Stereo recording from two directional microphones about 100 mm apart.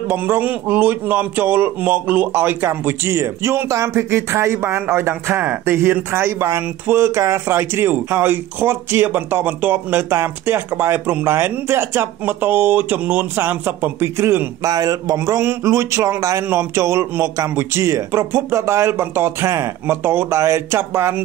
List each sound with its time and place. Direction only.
0.1 s a man's voice: 20° right (ahead or behind)
14.7 s a man's voice: 35° right (ahead or behind)